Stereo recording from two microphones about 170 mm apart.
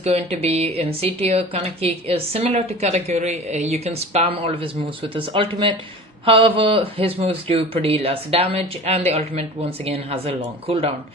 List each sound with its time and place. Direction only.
0.0 s a woman's voice: 35° right (ahead or behind)